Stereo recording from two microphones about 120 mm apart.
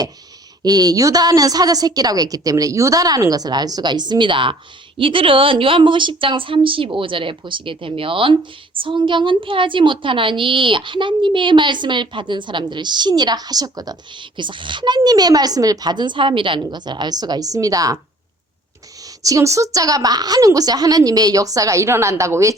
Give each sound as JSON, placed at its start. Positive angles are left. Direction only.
{"t": 0.6, "sound": "a woman's voice", "side_deg": -35}
{"t": 19.0, "sound": "a woman's voice", "side_deg": -30}